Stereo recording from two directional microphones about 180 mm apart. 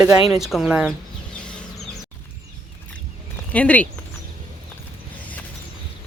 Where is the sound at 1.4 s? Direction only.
5° left (ahead or behind).